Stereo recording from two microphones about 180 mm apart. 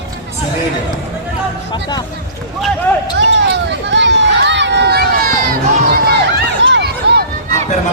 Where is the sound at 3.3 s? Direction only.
85° right; by 6.2 s 55° right (ahead or behind).